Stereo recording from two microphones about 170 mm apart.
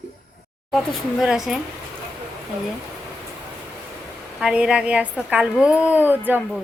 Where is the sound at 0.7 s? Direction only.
Centre (ahead or behind).